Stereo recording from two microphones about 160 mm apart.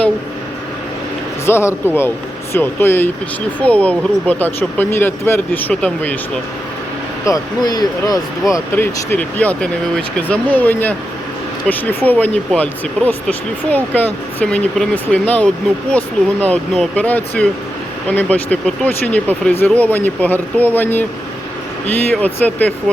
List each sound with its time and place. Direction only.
1.5 s speech: 15° left (ahead or behind)
7.3 s speech: 25° left (ahead or behind)
22.1 s speech: 10° left (ahead or behind)